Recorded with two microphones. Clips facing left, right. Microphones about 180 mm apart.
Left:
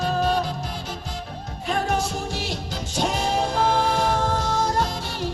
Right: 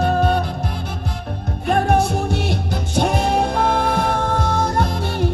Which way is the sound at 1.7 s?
60° right (ahead or behind).